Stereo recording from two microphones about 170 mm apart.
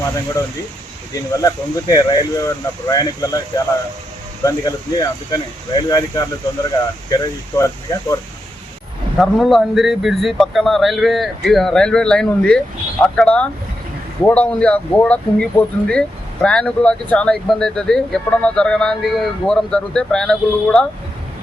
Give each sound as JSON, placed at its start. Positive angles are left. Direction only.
{"t": 1.1, "sound": "speech", "side_deg": 20}
{"t": 4.4, "sound": "speech", "side_deg": 20}
{"t": 9.1, "sound": "speech", "side_deg": 0}